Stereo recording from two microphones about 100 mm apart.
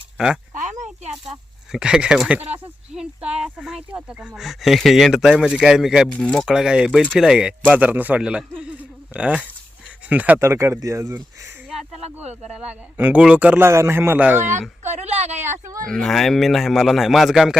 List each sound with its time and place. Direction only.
1.7 s a man's voice: 10° right (ahead or behind)
6.1 s speech: 10° left (ahead or behind)
6.5 s a man's voice: 5° right (ahead or behind)
10.4 s speech: 25° right (ahead or behind)
11.7 s a sound: centre (ahead or behind)
11.9 s speech: 90° right
12.5 s a man's voice: 15° right (ahead or behind)
13.7 s speech: 30° right (ahead or behind)
15.0 s a sound: 90° right
15.4 s speech: 25° right (ahead or behind)
15.9 s speech: 5° left (ahead or behind)